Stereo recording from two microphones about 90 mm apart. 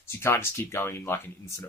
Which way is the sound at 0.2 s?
25° left (ahead or behind).